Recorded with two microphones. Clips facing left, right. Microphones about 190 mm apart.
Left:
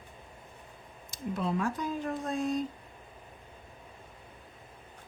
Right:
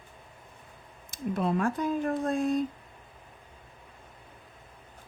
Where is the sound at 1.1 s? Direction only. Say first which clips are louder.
Right 4 dB; 55° right (ahead or behind).